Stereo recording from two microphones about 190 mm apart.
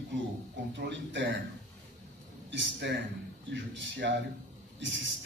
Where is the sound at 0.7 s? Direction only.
70° right (ahead or behind).